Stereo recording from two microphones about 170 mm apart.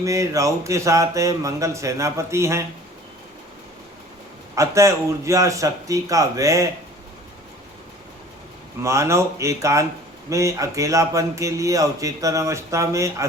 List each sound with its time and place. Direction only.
0.0 s a man's voice: 20° right (ahead or behind)
4.5 s a man's voice: 20° right (ahead or behind)
8.8 s a man's voice: 15° right (ahead or behind)